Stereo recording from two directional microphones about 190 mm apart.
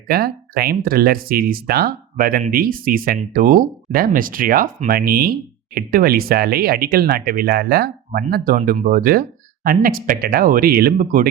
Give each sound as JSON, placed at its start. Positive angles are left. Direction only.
{"t": 0.1, "sound": "speech", "side_deg": -55}